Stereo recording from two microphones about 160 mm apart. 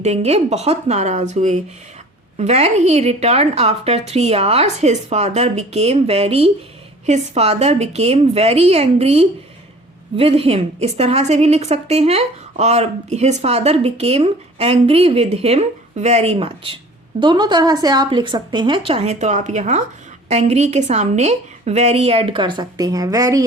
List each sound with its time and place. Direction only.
0.0 s a woman's voice: 40° right (ahead or behind)
17.2 s a woman's voice: 30° right (ahead or behind)